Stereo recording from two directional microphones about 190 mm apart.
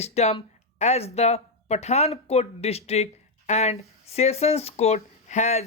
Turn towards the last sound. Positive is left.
turn(degrees=35)  # may be behind; listen again after turning